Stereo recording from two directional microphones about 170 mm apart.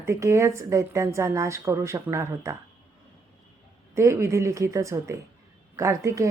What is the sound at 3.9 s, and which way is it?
Speech, 15° right (ahead or behind).